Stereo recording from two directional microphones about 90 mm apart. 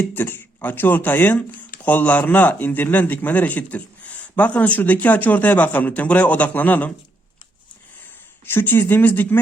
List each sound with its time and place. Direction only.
0.0 s speech: 20° left (ahead or behind)
8.4 s speech: 25° left (ahead or behind)